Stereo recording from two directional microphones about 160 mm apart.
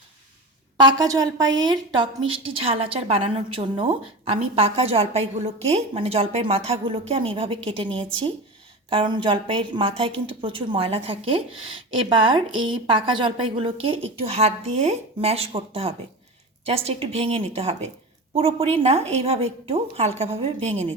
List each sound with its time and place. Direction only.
0.8 s a woman's voice: 25° right (ahead or behind)